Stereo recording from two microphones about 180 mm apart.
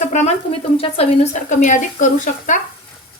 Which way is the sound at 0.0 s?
40° left (ahead or behind).